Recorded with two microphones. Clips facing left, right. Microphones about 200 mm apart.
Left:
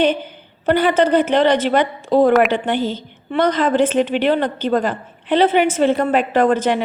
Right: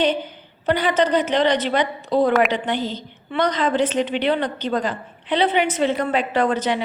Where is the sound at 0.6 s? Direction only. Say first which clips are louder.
Left 4 dB; 50° left (ahead or behind).